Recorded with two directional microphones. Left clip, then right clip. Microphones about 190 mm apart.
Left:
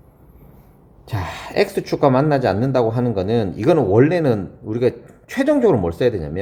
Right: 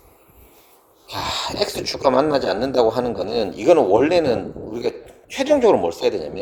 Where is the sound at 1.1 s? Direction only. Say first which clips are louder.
Left 2 dB; 25° right (ahead or behind).